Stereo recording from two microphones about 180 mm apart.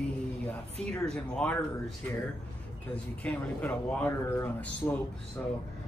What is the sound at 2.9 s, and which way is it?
Speech, 5° left (ahead or behind).